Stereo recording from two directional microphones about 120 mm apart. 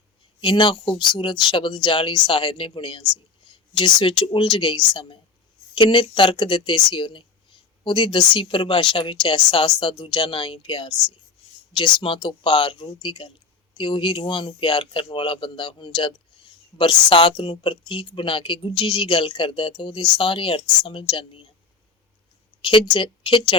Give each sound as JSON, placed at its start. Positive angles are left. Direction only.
{"t": 0.4, "sound": "speech", "side_deg": 45}
{"t": 11.9, "sound": "speech", "side_deg": 40}
{"t": 22.6, "sound": "speech", "side_deg": 40}